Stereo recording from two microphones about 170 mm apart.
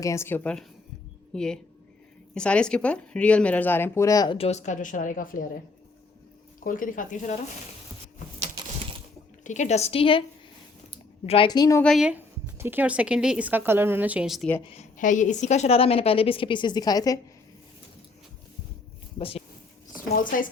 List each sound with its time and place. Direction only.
0.0 s speech: 15° left (ahead or behind)
4.4 s speech: 40° left (ahead or behind)
6.6 s speech: 50° left (ahead or behind)
8.5 s a sound: 30° right (ahead or behind)
9.4 s a woman's voice: 45° left (ahead or behind); by 11.8 s 25° left (ahead or behind)
11.8 s a woman's voice: centre (ahead or behind)
14.7 s a woman's voice: 45° left (ahead or behind); by 17.2 s 20° left (ahead or behind)
20.1 s speech: 55° left (ahead or behind)